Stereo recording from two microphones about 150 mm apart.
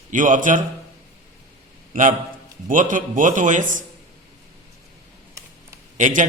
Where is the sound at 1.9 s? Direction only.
60° right (ahead or behind).